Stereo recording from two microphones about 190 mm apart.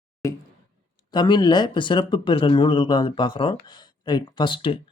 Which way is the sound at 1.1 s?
20° left (ahead or behind).